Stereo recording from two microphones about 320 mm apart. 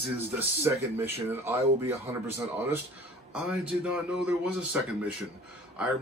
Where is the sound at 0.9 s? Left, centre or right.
Centre.